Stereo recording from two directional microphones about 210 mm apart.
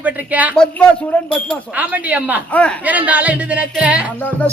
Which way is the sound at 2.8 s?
5° right (ahead or behind).